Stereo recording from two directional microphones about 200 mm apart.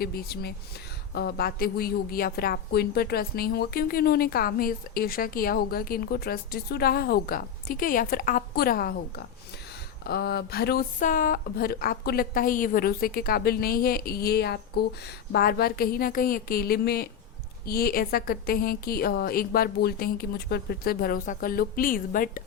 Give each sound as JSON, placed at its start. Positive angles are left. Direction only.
{"t": 0.0, "sound": "a woman's voice", "side_deg": 50}